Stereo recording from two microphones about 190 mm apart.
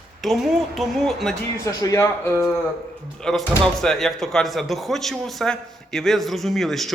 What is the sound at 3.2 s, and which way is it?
Speech, centre (ahead or behind).